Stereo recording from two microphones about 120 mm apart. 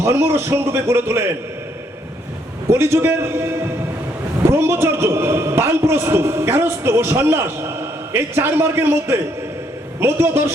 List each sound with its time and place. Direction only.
0.0 s a man's voice: 20° right (ahead or behind)
2.6 s a man's voice: 20° right (ahead or behind)